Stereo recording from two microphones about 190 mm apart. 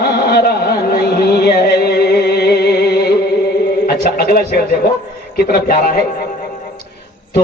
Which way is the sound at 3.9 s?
55° left (ahead or behind).